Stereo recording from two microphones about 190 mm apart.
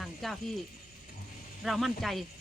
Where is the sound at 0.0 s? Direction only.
Centre (ahead or behind).